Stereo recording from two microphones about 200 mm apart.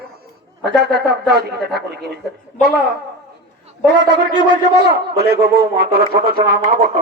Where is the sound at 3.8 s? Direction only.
60° right (ahead or behind).